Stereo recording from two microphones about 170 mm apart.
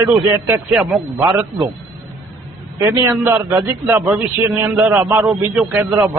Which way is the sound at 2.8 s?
15° right (ahead or behind).